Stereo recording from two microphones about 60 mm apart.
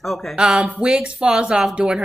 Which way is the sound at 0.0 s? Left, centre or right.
Centre.